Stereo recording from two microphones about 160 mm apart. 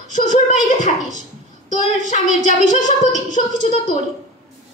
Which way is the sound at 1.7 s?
50° left (ahead or behind).